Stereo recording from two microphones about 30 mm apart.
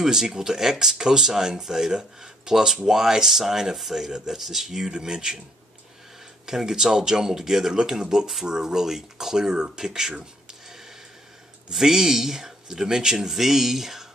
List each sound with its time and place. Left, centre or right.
0.0 s speech: centre
4.9 s speech: right
6.4 s speech: centre
11.7 s speech: centre